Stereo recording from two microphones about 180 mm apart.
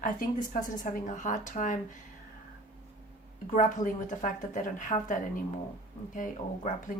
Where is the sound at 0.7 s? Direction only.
45° left (ahead or behind).